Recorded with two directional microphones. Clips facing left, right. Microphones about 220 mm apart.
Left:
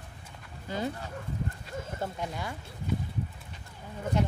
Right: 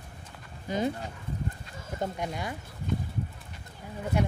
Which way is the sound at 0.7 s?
15° right (ahead or behind).